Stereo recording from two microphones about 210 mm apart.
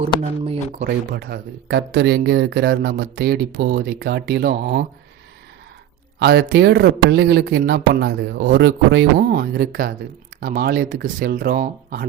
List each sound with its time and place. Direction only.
0.2 s speech: 25° right (ahead or behind)
0.8 s speech: 50° right (ahead or behind)
6.1 s speech: 50° right (ahead or behind)